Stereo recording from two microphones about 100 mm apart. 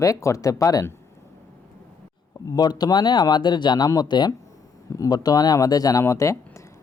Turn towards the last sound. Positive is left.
turn(degrees=30)  # may be behind; listen again after turning